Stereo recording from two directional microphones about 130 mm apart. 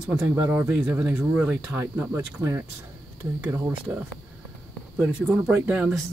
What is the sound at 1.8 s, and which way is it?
Speech, 20° right (ahead or behind).